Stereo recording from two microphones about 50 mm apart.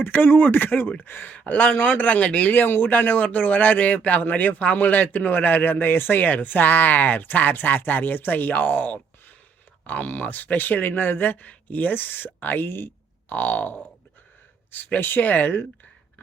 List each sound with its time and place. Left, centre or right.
0.0 s speech: left
1.3 s speech: left
2.5 s speech: left
13.3 s speech: left
15.0 s speech: left